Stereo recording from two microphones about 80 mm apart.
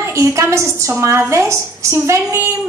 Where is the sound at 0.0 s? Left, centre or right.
Right.